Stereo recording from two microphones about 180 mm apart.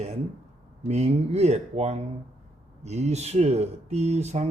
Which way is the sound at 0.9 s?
40° right (ahead or behind).